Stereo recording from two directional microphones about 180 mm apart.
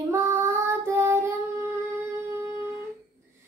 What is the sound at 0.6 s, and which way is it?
Child singing, 15° right (ahead or behind).